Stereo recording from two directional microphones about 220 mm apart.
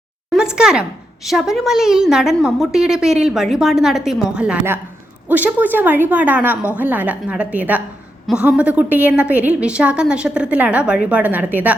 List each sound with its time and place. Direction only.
0.3 s a woman's voice: 5° right (ahead or behind)